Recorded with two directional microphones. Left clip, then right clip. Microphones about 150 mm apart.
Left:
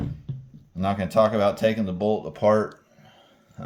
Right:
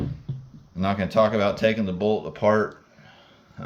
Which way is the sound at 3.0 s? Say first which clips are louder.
Right 3 dB; 25° left (ahead or behind).